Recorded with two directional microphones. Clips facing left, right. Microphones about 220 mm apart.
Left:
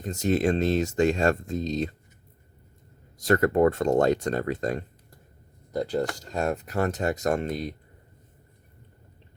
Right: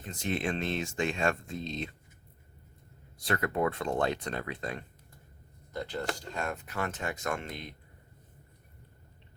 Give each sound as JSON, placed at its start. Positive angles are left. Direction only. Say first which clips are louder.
{"t": 0.0, "sound": "speech", "louder": "left 9 dB", "side_deg": 40}
{"t": 3.2, "sound": "speech", "louder": "left 10 dB", "side_deg": 40}